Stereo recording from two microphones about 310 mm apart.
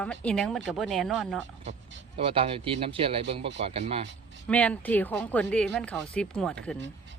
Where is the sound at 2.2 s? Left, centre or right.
Centre.